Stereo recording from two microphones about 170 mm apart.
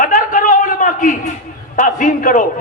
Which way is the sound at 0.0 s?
50° left (ahead or behind).